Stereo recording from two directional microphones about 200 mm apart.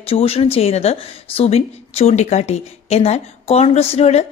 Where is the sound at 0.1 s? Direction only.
30° left (ahead or behind).